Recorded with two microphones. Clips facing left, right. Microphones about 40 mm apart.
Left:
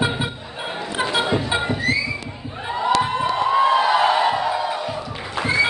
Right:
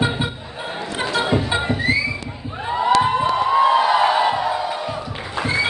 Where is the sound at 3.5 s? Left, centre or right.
Centre.